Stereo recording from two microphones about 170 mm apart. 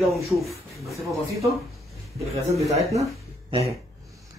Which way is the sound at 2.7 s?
40° right (ahead or behind).